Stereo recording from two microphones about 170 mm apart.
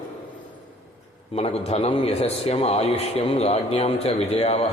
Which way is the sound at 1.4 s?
35° left (ahead or behind).